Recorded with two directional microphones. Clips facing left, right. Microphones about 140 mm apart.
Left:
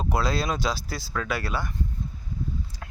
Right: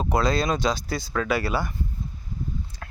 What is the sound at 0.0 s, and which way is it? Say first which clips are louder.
Speech: right 3 dB; 5° left (ahead or behind).